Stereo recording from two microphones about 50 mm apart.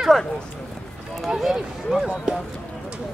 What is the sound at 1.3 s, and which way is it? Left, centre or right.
Run, centre.